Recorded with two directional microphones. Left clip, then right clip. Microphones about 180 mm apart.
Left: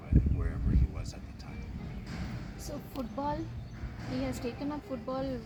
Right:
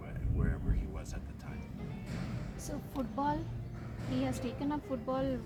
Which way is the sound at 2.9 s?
45° left (ahead or behind).